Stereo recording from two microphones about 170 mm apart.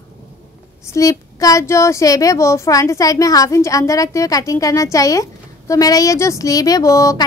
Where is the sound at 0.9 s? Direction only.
20° left (ahead or behind).